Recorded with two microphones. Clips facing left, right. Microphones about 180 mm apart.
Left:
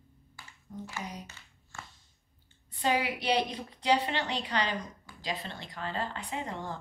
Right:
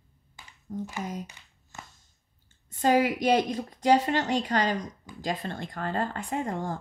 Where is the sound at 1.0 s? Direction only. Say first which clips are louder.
Right 4 dB; 45° right (ahead or behind).